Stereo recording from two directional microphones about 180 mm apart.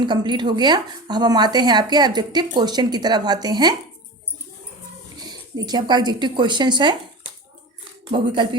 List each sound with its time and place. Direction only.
0.0 s speech: 25° right (ahead or behind)
5.2 s speech: 20° right (ahead or behind)
8.1 s speech: 25° right (ahead or behind)